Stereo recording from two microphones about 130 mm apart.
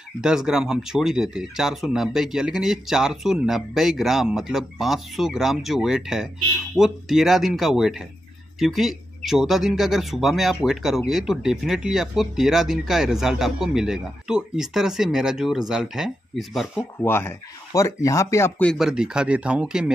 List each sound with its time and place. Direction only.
0.2 s speech: 5° right (ahead or behind)
17.0 s speech: 20° left (ahead or behind)
18.6 s speech: 5° left (ahead or behind)
18.9 s speech: 5° right (ahead or behind)